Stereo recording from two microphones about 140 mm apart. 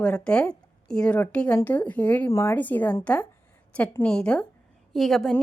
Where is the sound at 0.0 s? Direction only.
10° left (ahead or behind).